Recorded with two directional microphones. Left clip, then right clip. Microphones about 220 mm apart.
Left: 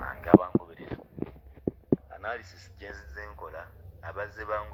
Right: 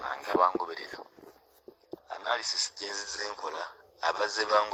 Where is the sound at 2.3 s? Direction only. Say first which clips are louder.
Right 11 dB; 40° right (ahead or behind).